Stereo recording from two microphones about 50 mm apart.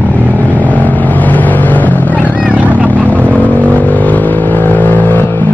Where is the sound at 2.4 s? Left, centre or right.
Right.